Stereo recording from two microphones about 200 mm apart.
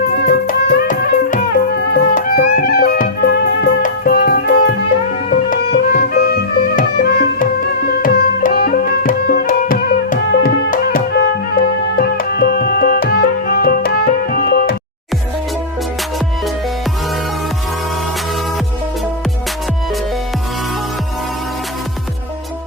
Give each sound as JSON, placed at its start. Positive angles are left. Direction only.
{"t": 0.2, "sound": "music", "side_deg": 45}